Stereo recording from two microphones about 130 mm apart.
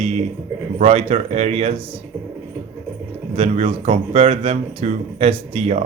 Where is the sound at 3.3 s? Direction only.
50° right (ahead or behind).